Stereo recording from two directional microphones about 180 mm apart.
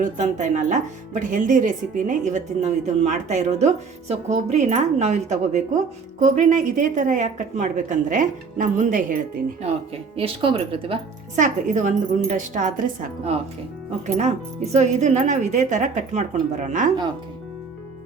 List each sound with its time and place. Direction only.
0.0 s speech: 45° right (ahead or behind)
10.2 s speech: 30° right (ahead or behind)
11.3 s speech: 45° right (ahead or behind)
14.2 s speech: 40° right (ahead or behind)